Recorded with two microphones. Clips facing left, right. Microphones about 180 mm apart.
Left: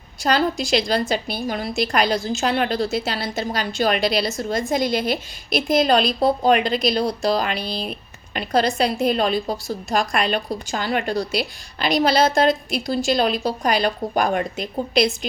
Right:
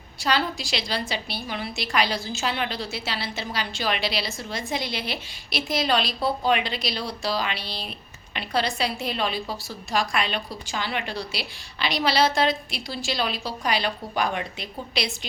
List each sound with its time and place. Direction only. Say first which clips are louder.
0.2 s a woman's voice: left 6 dB; 45° left (ahead or behind)